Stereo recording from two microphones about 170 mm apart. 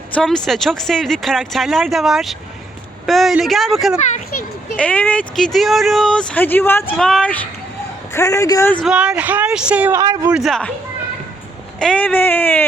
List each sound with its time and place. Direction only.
0.1 s speech: 5° left (ahead or behind)
8.1 s a man's voice: 15° left (ahead or behind)
8.7 s speech: 5° right (ahead or behind)
10.0 s a man's voice: 20° right (ahead or behind)
10.3 s speech: centre (ahead or behind)
11.8 s speech: 5° left (ahead or behind)